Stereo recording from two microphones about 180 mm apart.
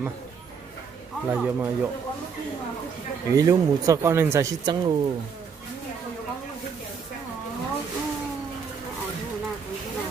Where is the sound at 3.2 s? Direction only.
20° right (ahead or behind).